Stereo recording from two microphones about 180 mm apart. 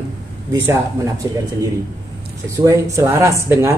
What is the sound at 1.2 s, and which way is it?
Speech, 20° right (ahead or behind).